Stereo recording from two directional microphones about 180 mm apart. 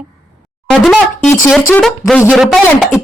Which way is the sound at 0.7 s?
Centre (ahead or behind).